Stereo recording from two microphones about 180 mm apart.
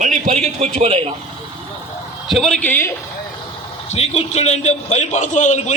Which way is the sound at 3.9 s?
35° left (ahead or behind).